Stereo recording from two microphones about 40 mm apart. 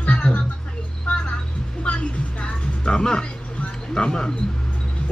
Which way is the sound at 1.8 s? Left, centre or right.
Left.